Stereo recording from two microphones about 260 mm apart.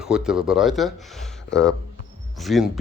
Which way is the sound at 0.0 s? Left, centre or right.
Centre.